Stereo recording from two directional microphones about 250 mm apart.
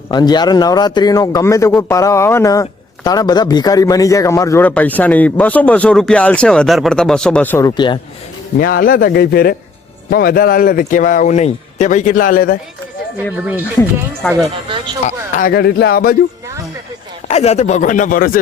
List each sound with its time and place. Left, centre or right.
0.1 s a man's voice: centre
8.5 s a man's voice: left
13.3 s speech: centre
15.0 s a man's voice: left
17.2 s speech: left